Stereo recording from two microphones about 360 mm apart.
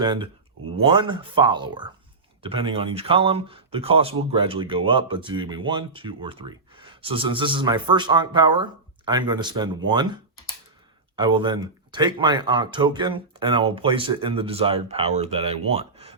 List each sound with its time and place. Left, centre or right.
0.0 s speech: centre
11.2 s speech: centre